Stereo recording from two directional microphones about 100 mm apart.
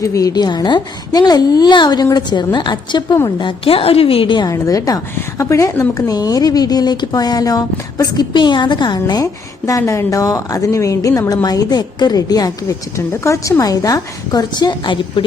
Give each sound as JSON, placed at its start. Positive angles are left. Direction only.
{"t": 0.0, "sound": "a woman's voice", "side_deg": 35}
{"t": 4.4, "sound": "speech", "side_deg": 35}